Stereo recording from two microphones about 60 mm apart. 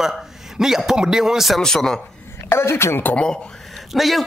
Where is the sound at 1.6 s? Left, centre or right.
Centre.